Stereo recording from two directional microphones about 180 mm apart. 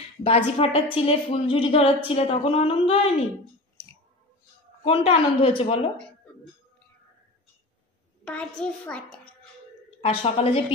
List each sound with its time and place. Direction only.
0.2 s a woman's voice: 30° left (ahead or behind)
4.8 s a woman's voice: 30° left (ahead or behind)
8.3 s a child's voice: 5° left (ahead or behind)
10.0 s a woman's voice: 35° left (ahead or behind)